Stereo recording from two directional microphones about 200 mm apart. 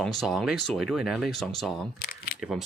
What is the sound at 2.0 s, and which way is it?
Camera, 50° left (ahead or behind).